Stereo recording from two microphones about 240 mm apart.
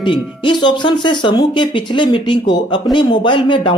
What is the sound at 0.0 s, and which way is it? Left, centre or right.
A woman's voice, centre.